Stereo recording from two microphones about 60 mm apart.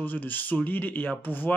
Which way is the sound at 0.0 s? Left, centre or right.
Left.